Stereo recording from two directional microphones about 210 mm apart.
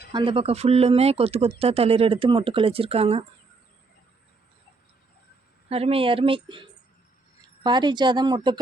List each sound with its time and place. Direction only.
0.1 s speech: 25° right (ahead or behind)
5.6 s speech: 30° right (ahead or behind)